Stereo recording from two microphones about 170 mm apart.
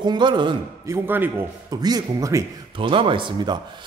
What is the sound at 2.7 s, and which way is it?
Speech, 30° right (ahead or behind).